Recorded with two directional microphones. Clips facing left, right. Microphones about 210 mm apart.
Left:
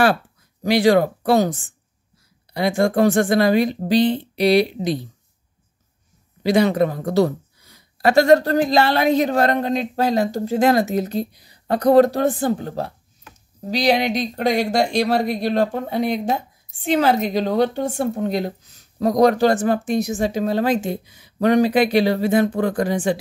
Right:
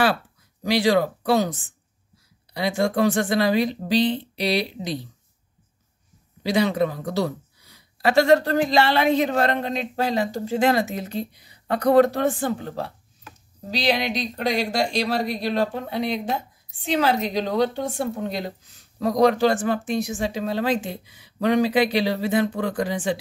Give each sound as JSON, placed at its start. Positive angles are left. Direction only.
{"t": 0.7, "sound": "a woman's voice", "side_deg": 50}
{"t": 6.4, "sound": "a woman's voice", "side_deg": 50}